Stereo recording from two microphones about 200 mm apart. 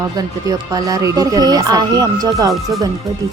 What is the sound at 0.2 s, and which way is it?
Speech, 20° right (ahead or behind).